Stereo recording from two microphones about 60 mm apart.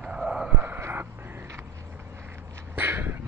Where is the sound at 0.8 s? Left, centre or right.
Right.